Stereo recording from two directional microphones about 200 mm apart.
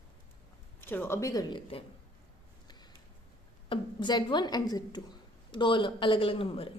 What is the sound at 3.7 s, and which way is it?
A woman's voice, 25° left (ahead or behind).